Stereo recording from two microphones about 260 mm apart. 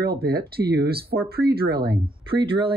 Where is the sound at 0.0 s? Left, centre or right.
Right.